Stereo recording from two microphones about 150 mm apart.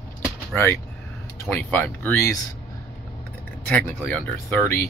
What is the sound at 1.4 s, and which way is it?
Speech, 15° left (ahead or behind).